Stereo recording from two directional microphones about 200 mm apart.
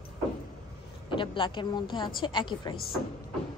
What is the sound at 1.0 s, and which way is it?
A woman's voice, 25° left (ahead or behind).